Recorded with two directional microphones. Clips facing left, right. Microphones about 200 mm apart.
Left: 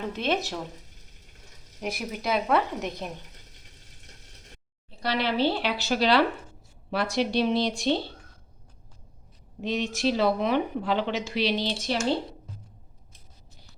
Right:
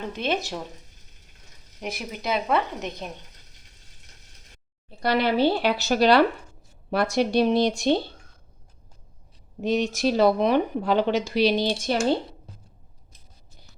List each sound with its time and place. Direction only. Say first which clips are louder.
0.1 s speech: right 1 dB; centre (ahead or behind)
1.8 s speech: left 1 dB; centre (ahead or behind)
4.9 s speech: right 5 dB; 50° right (ahead or behind)
9.6 s speech: right 5 dB; 45° right (ahead or behind)